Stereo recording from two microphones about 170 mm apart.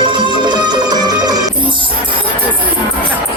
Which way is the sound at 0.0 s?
25° right (ahead or behind).